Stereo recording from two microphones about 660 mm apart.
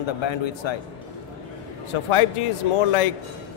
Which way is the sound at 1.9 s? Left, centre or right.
Left.